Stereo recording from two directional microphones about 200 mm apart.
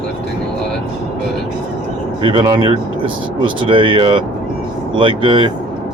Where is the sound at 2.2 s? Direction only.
25° right (ahead or behind).